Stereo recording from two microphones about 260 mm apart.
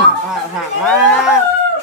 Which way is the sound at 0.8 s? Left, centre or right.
Centre.